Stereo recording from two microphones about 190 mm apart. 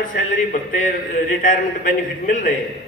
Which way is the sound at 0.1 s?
45° left (ahead or behind).